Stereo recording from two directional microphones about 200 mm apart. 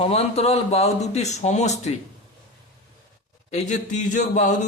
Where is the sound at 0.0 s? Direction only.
30° left (ahead or behind).